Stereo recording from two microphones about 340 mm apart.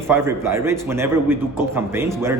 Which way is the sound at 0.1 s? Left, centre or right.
Centre.